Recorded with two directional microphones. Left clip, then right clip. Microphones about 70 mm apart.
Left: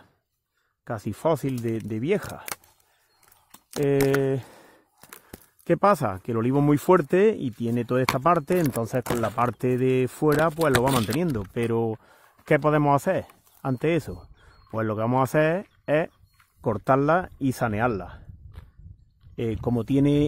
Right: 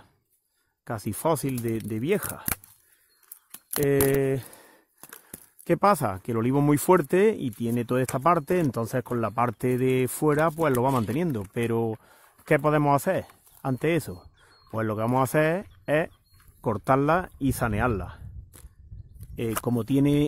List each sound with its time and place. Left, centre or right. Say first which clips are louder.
0.8 s speech: left 1 dB; left
4.3 s a sound: left 1 dB; left
5.6 s speech: left 1 dB; left
19.3 s speech: left 1 dB; left